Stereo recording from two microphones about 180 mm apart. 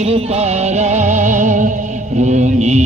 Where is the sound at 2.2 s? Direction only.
40° right (ahead or behind).